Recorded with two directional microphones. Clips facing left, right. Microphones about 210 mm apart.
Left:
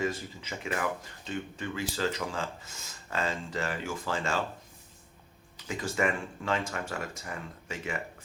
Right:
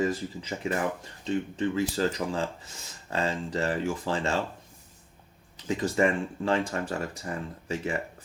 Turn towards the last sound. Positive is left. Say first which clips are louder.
# right 6 dB
turn(degrees=-35)  # may be behind; listen again after turning